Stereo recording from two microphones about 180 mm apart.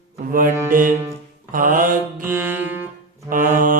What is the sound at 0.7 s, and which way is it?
Music, 50° right (ahead or behind).